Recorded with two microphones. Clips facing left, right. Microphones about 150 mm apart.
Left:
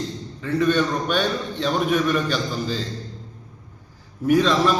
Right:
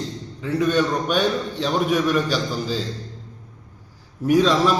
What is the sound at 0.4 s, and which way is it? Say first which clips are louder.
A man's voice: even; 10° right (ahead or behind).